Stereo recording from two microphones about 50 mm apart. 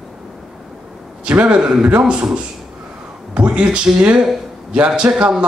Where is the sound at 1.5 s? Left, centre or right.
Centre.